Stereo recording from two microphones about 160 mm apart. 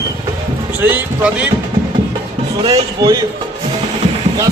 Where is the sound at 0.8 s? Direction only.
10° right (ahead or behind).